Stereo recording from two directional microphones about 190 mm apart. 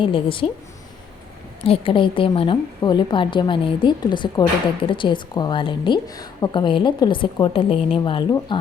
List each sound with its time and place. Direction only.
0.0 s a woman's voice: 25° left (ahead or behind)
1.6 s a woman's voice: 30° left (ahead or behind)